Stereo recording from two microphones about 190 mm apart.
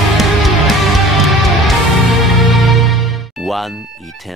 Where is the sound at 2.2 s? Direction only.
Centre (ahead or behind).